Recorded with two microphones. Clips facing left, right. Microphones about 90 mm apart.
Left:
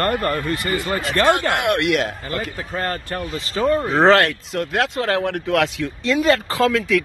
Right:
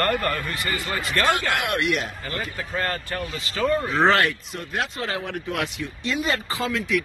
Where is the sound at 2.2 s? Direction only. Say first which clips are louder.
Left 4 dB; 30° left (ahead or behind).